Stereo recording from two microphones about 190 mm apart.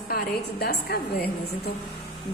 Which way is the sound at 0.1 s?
55° left (ahead or behind).